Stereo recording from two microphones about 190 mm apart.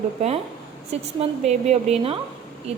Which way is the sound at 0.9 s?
35° right (ahead or behind).